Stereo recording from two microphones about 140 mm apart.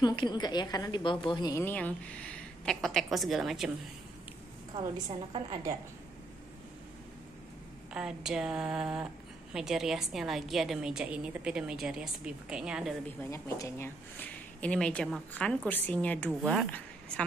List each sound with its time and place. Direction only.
0.0 s a woman's voice: 30° left (ahead or behind)
1.5 s a woman's voice: 15° left (ahead or behind); by 3.7 s 5° right (ahead or behind)
4.7 s a woman's voice: 35° right (ahead or behind)
7.9 s a woman's voice: 5° right (ahead or behind)
13.2 s a woman's voice: 20° left (ahead or behind)